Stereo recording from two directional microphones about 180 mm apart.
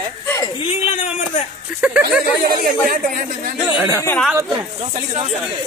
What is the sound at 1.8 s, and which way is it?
Speech, 5° right (ahead or behind).